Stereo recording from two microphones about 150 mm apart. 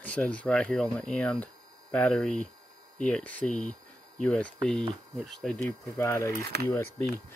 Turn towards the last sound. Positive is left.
turn(degrees=15)  # may be behind; listen again after turning